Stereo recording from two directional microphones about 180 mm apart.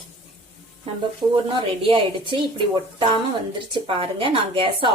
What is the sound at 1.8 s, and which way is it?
Speech, 30° right (ahead or behind).